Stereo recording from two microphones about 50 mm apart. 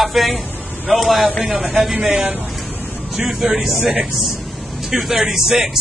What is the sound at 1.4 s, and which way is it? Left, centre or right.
Speech, right.